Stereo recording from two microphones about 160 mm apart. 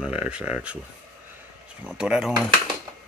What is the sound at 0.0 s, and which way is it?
Speech, 5° right (ahead or behind).